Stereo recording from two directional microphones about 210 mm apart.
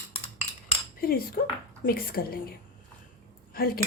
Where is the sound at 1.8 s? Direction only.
45° left (ahead or behind).